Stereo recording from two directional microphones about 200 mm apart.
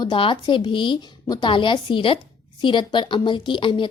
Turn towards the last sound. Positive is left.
turn(degrees=25)  # may be behind; listen again after turning